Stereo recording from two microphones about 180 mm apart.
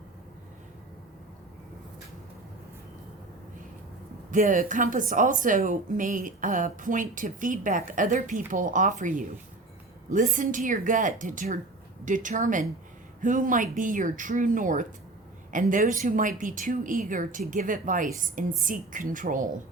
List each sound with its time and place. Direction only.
4.3 s a woman's voice: 45° right (ahead or behind)